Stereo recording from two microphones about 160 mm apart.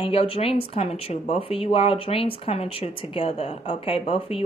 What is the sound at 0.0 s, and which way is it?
Speech, 35° left (ahead or behind).